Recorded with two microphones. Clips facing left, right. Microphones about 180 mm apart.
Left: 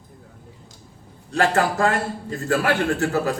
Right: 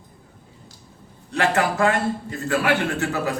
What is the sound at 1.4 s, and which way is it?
A man's voice, 35° left (ahead or behind).